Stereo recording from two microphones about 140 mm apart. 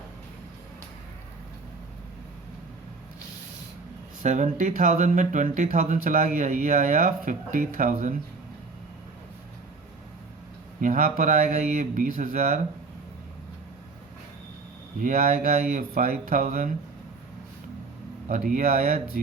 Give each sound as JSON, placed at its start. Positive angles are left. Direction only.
{"t": 4.2, "sound": "speech", "side_deg": -60}
{"t": 10.8, "sound": "speech", "side_deg": -65}
{"t": 15.0, "sound": "speech", "side_deg": -90}
{"t": 18.3, "sound": "speech", "side_deg": -65}